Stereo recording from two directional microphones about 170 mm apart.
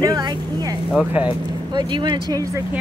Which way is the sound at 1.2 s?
5° right (ahead or behind).